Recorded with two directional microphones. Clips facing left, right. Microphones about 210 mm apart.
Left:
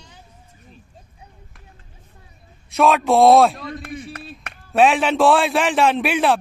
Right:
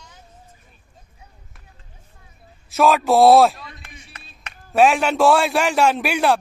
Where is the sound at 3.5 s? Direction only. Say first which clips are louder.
Left 12 dB; 45° left (ahead or behind).